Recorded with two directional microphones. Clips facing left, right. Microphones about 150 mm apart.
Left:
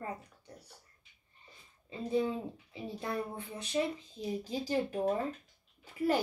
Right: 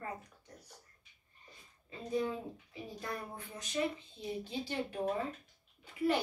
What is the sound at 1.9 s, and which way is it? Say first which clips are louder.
A woman's voice: left 3 dB; 30° left (ahead or behind).